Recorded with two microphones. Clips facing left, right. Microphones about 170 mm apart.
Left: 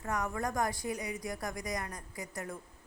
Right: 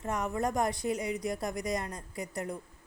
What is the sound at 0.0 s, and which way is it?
A woman's voice, 20° right (ahead or behind).